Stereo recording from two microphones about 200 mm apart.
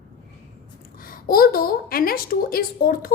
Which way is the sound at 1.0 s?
45° left (ahead or behind).